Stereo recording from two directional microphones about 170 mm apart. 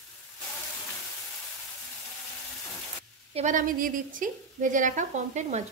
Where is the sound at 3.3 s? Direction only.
45° right (ahead or behind).